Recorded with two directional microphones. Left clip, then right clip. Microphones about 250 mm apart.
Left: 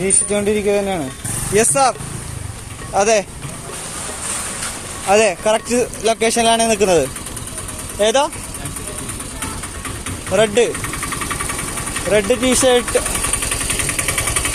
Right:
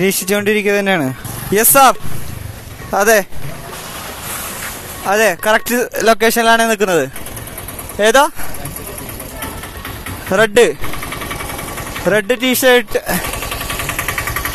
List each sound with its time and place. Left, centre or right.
0.0 s speech: right
5.1 s speech: right
10.3 s speech: right
12.1 s speech: right
13.2 s vehicle: left